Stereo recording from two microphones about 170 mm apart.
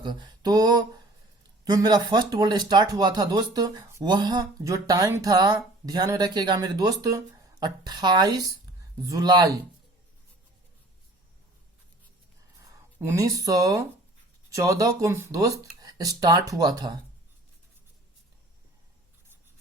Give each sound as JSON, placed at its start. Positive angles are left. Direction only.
{"t": 0.0, "sound": "speech", "side_deg": -25}
{"t": 13.0, "sound": "speech", "side_deg": -15}